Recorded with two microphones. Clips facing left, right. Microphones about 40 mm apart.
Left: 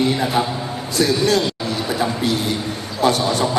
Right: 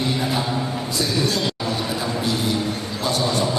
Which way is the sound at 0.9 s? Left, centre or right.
Left.